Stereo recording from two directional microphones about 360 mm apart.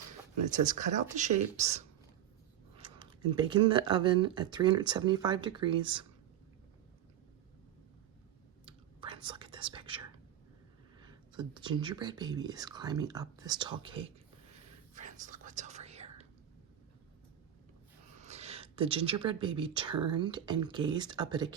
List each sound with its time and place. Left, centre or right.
0.5 s speech: right
3.0 s speech: centre
8.6 s whispering: centre
11.0 s speech: centre
14.9 s whispering: centre
18.2 s a sound: centre
19.2 s speech: centre